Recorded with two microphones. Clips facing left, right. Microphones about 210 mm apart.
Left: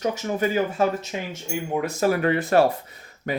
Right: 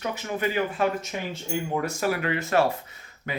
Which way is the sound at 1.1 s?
20° left (ahead or behind).